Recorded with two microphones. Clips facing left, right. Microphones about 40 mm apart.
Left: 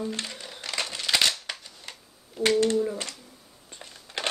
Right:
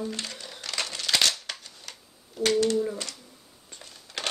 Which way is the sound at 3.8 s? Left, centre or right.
Centre.